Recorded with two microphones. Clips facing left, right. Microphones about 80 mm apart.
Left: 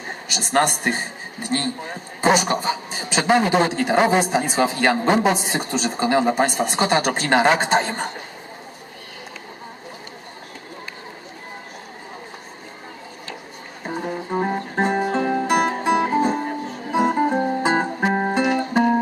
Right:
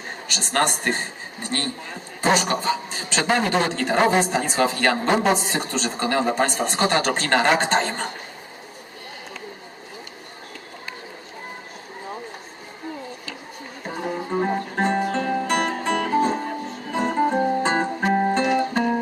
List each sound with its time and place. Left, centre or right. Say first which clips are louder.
0.3 s a man's voice: left 3 dB; centre
13.8 s music: left 1 dB; centre
15.4 s music: left 4 dB; centre